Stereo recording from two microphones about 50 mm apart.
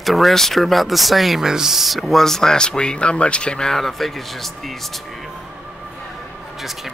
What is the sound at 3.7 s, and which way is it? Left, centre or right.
Speech, centre.